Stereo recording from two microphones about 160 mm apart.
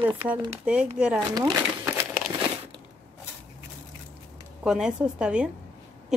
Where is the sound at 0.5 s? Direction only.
5° right (ahead or behind).